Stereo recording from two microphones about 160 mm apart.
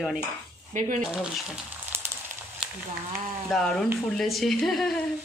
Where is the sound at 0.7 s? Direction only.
50° right (ahead or behind).